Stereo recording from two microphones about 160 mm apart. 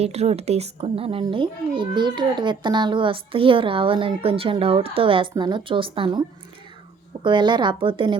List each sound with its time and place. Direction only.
0.0 s a woman's voice: 40° right (ahead or behind)